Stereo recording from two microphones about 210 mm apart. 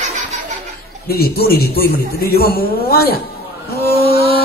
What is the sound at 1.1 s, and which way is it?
A woman's voice, 45° left (ahead or behind).